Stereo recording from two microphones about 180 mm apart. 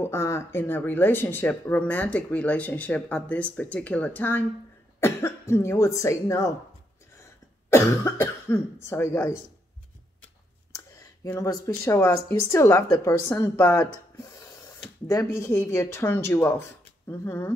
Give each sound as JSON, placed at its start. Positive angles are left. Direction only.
{"t": 0.0, "sound": "speech", "side_deg": 15}
{"t": 7.7, "sound": "speech", "side_deg": 15}
{"t": 10.7, "sound": "a sound", "side_deg": 15}
{"t": 12.3, "sound": "speech", "side_deg": 15}
{"t": 15.0, "sound": "speech", "side_deg": 15}